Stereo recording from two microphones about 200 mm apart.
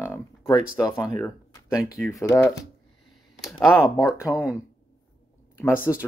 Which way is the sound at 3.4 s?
Centre (ahead or behind).